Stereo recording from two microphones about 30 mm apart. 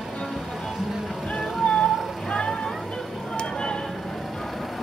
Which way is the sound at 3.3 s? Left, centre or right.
Left.